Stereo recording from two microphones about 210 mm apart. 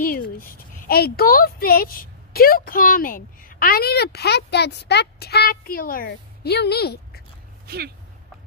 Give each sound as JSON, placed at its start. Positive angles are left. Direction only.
{"t": 0.4, "sound": "a woman's voice", "side_deg": 45}
{"t": 7.6, "sound": "speech", "side_deg": -45}